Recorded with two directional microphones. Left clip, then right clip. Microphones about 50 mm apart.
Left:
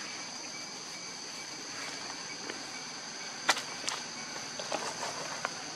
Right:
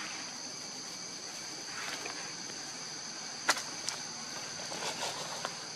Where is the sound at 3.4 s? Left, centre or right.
Centre.